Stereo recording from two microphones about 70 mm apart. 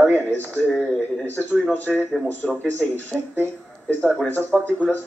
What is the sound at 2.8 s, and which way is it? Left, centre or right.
Speech, left.